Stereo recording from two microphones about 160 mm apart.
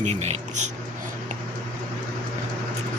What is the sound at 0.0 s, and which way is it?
Speech, 45° right (ahead or behind).